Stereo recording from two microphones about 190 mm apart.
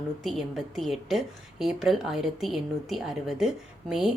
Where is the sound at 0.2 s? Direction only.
Centre (ahead or behind).